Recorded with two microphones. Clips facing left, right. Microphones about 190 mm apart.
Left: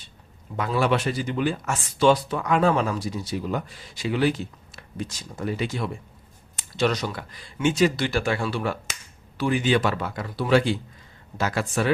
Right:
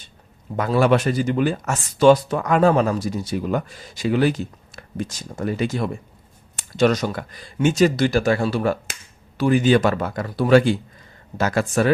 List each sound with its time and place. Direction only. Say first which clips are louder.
0.5 s speech: right 5 dB; 45° right (ahead or behind)